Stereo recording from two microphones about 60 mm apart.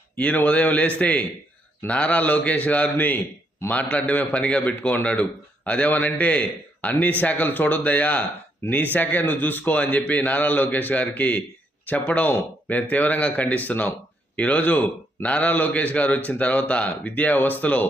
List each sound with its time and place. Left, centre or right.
0.2 s a man's voice: left